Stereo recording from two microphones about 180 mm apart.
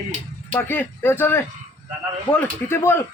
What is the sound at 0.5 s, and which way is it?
A man's voice, 10° left (ahead or behind).